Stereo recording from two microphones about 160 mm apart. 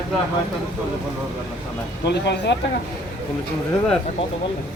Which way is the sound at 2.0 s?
90° left.